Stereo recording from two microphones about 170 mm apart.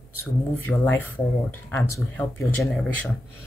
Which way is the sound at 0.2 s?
10° left (ahead or behind).